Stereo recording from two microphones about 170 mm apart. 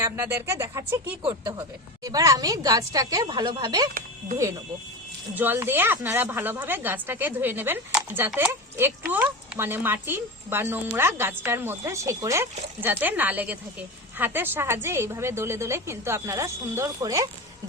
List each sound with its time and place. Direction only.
0.0 s speech: 15° right (ahead or behind)
1.2 s a woman's voice: 25° right (ahead or behind)
5.3 s speech: 10° right (ahead or behind)